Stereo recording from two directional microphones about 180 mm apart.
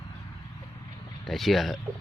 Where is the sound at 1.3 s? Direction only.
Centre (ahead or behind).